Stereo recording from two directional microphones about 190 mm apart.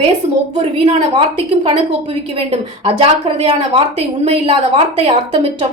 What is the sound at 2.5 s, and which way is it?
A woman's voice, 30° right (ahead or behind).